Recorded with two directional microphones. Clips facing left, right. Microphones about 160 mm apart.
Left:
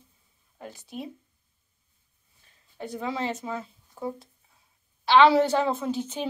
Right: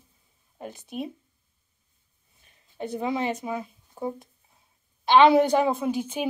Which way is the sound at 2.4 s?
20° right (ahead or behind).